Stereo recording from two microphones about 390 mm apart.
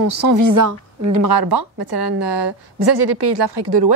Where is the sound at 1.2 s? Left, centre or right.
Right.